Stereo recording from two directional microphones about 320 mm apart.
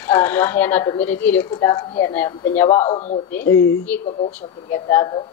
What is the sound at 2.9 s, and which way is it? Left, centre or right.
Speech, left.